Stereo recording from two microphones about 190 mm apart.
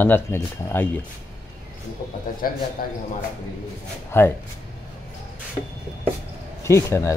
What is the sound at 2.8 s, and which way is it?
Speech, 50° left (ahead or behind).